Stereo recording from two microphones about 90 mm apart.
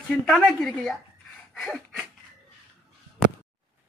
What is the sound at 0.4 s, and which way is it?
Speech, 5° left (ahead or behind).